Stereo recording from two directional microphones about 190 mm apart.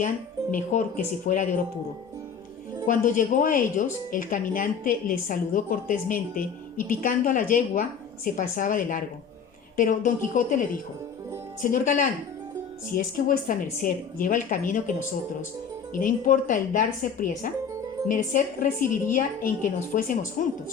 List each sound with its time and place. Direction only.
0.5 s a woman's voice: 45° left (ahead or behind)
2.8 s a woman's voice: 45° left (ahead or behind)
13.1 s a woman's voice: 45° left (ahead or behind)